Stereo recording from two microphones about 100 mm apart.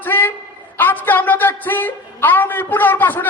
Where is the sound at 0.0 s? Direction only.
20° left (ahead or behind).